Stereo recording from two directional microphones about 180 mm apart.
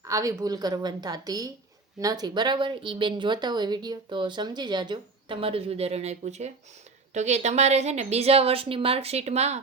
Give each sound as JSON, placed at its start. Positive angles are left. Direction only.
{"t": 0.1, "sound": "a woman's voice", "side_deg": -20}